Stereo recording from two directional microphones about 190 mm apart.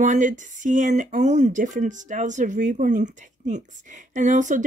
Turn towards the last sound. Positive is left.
turn(degrees=-40)  # may be behind; listen again after turning